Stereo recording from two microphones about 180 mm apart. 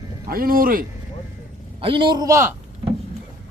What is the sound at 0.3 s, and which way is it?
Speech, 55° right (ahead or behind).